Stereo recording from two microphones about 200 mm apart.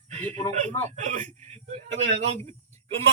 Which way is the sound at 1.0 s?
40° right (ahead or behind).